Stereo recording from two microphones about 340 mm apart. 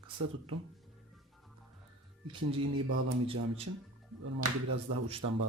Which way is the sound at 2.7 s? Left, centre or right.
Right.